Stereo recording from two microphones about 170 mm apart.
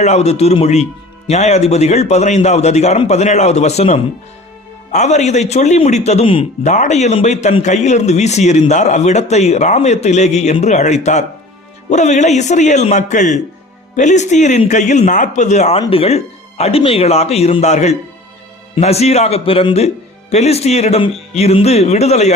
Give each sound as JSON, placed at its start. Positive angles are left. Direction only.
{"t": 0.0, "sound": "a man's voice", "side_deg": 40}